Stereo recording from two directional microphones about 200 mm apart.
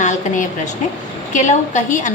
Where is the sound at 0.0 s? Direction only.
35° left (ahead or behind).